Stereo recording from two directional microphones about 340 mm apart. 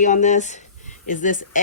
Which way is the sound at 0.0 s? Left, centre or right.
Left.